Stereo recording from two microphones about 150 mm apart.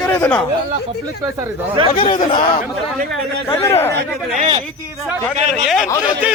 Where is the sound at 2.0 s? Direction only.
35° left (ahead or behind).